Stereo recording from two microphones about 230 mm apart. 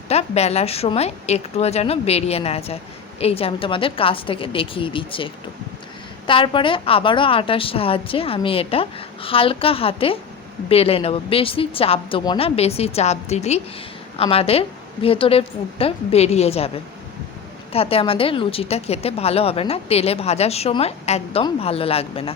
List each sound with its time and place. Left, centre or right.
0.1 s a woman's voice: left